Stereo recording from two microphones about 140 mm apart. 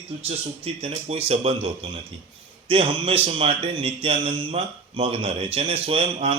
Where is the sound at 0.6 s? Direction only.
45° right (ahead or behind).